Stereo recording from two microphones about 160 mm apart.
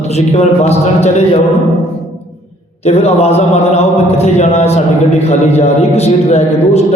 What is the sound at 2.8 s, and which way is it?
A man's voice, 40° left (ahead or behind).